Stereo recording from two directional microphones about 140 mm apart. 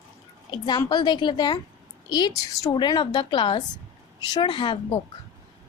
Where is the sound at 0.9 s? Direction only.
30° left (ahead or behind).